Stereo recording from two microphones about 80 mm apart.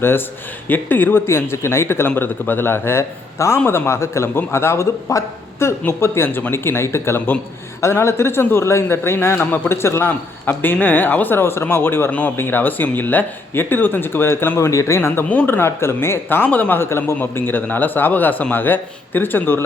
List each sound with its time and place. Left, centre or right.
0.7 s a man's voice: left
15.3 s a man's voice: left